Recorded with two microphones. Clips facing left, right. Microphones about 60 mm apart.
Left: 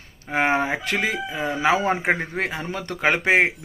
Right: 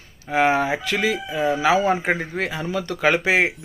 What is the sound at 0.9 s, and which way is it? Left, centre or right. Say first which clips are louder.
Speech: right 3 dB; left.